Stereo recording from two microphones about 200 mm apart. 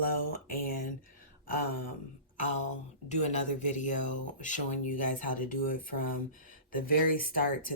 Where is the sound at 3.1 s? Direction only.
35° left (ahead or behind).